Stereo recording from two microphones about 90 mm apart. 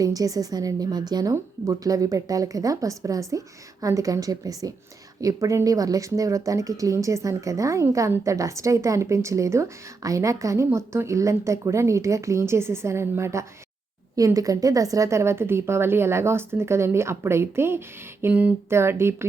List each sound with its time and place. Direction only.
0.0 s a woman's voice: 40° right (ahead or behind)
14.2 s speech: 40° right (ahead or behind); by 18.5 s 20° right (ahead or behind)
18.7 s speech: 30° right (ahead or behind)